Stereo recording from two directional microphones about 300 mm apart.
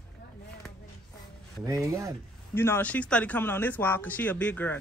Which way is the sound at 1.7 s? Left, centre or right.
Centre.